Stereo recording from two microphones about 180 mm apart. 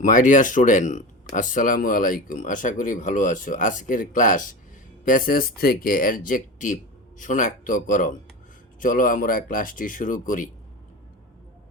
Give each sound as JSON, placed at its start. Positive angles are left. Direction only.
{"t": 0.0, "sound": "speech", "side_deg": 45}